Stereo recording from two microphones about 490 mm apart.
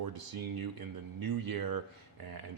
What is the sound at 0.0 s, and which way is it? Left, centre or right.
Speech, right.